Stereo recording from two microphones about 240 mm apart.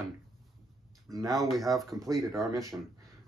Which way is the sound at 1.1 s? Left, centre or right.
Centre.